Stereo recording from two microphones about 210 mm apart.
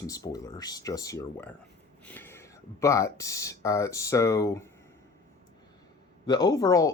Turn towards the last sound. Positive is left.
turn(degrees=15)  # may be behind; listen again after turning